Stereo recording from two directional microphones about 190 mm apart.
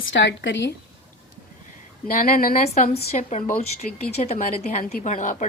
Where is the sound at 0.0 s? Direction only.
75° left (ahead or behind).